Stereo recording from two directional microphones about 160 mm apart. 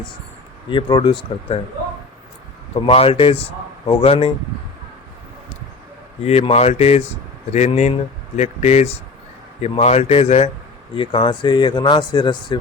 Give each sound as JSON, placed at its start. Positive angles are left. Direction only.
{"t": 0.7, "sound": "speech", "side_deg": 30}
{"t": 2.7, "sound": "a man's voice", "side_deg": 35}
{"t": 6.2, "sound": "a man's voice", "side_deg": 40}